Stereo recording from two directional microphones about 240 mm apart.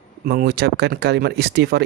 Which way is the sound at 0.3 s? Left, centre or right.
Right.